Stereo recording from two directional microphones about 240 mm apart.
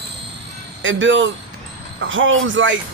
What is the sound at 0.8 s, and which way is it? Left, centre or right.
Speech, right.